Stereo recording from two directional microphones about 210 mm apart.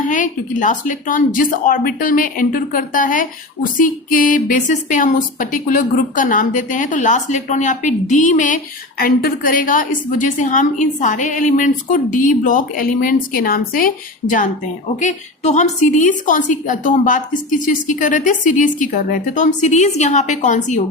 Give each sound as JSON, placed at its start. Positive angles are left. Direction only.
{"t": 0.1, "sound": "a woman's voice", "side_deg": 35}